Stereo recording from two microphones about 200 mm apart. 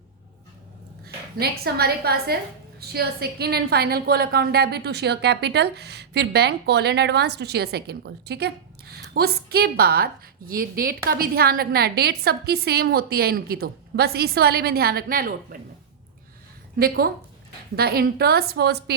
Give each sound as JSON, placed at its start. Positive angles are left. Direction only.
{"t": 1.0, "sound": "a woman's voice", "side_deg": -50}
{"t": 16.7, "sound": "a woman's voice", "side_deg": -50}